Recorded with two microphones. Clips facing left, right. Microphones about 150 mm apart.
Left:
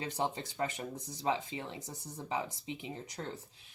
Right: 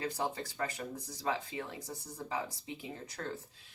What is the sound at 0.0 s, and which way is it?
Speech, 20° left (ahead or behind).